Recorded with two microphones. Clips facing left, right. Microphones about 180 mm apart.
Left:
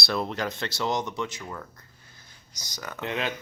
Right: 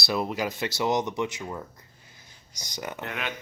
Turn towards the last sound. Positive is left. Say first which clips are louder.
# left 4 dB
turn(degrees=30)  # may be behind; listen again after turning